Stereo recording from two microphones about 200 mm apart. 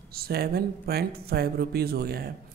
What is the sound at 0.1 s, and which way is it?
Speech, 50° right (ahead or behind).